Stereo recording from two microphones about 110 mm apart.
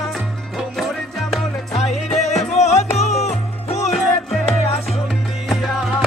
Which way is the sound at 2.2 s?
90° left.